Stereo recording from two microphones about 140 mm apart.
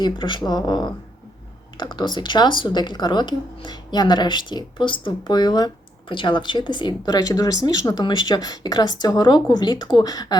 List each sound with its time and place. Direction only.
0.0 s speech: 35° left (ahead or behind)